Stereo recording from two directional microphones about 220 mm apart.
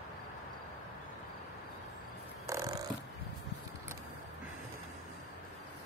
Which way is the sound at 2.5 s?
15° right (ahead or behind).